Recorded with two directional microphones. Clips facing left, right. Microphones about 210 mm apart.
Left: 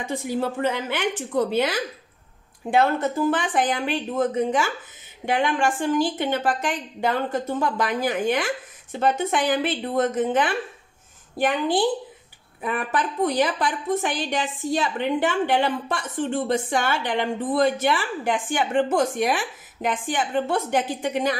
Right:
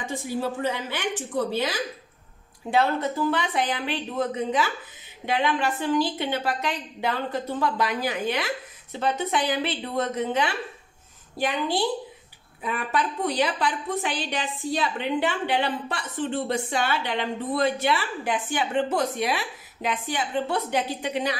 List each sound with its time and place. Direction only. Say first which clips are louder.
0.4 s a woman's voice: left 2 dB; 55° left (ahead or behind)